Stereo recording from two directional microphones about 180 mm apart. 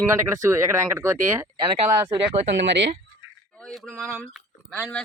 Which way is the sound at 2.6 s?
75° right (ahead or behind).